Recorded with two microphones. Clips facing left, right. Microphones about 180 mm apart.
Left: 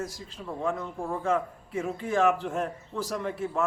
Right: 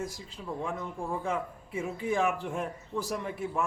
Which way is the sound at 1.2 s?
15° right (ahead or behind).